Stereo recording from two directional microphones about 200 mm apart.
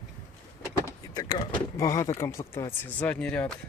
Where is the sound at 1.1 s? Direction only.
20° left (ahead or behind).